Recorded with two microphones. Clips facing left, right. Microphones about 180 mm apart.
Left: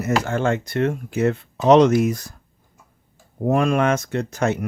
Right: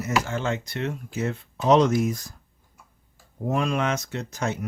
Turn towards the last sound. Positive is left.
turn(degrees=60)  # may be behind; listen again after turning